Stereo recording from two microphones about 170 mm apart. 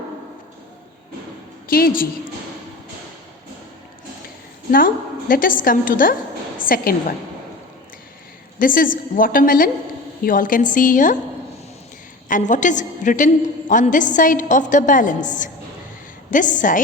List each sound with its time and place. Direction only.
1.7 s a woman's voice: 60° left (ahead or behind)
5.3 s a woman's voice: 55° left (ahead or behind)
8.5 s a woman's voice: 55° left (ahead or behind)
12.3 s a woman's voice: 45° left (ahead or behind)